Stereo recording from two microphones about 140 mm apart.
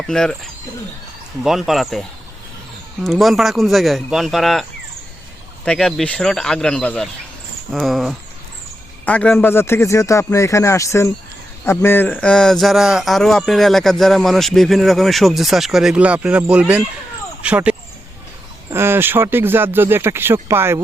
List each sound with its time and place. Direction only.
0.1 s speech: 5° left (ahead or behind)
1.5 s speech: centre (ahead or behind)
5.6 s speech: 5° left (ahead or behind); by 20.7 s 15° right (ahead or behind)